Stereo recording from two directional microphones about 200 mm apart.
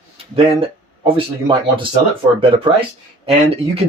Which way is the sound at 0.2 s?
30° right (ahead or behind).